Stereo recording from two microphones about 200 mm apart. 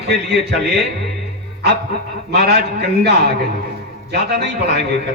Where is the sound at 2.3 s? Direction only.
55° right (ahead or behind).